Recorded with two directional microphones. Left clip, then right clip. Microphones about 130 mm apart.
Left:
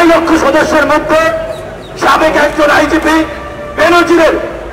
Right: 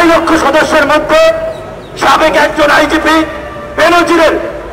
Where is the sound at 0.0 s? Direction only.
30° right (ahead or behind).